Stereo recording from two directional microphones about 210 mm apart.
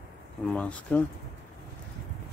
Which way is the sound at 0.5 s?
5° left (ahead or behind).